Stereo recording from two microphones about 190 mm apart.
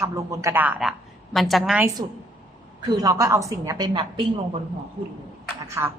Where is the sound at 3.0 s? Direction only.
20° right (ahead or behind).